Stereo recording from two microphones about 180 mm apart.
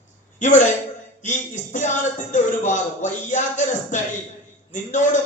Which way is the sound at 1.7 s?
45° left (ahead or behind).